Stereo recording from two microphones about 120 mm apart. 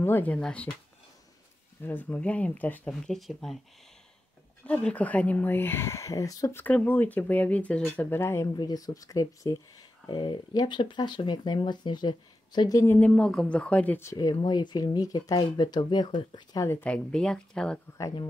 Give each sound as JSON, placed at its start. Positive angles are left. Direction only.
{"t": 0.0, "sound": "speech", "side_deg": 15}
{"t": 1.8, "sound": "speech", "side_deg": 15}
{"t": 2.9, "sound": "speech", "side_deg": 0}
{"t": 4.6, "sound": "speech", "side_deg": 10}
{"t": 6.6, "sound": "speech", "side_deg": 15}
{"t": 8.5, "sound": "speech", "side_deg": 30}
{"t": 12.8, "sound": "speech", "side_deg": 15}
{"t": 14.1, "sound": "speech", "side_deg": 35}
{"t": 16.6, "sound": "speech", "side_deg": 20}
{"t": 16.9, "sound": "speech", "side_deg": 5}